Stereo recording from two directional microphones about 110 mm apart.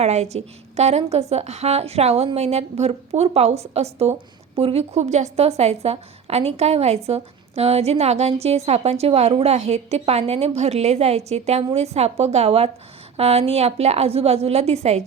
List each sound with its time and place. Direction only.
0.0 s a woman's voice: 85° right